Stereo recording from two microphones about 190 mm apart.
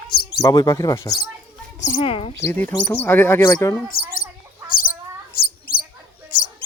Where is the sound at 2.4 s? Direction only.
10° left (ahead or behind).